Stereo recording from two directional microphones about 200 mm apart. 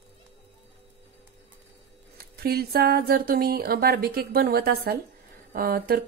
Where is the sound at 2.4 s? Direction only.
50° right (ahead or behind).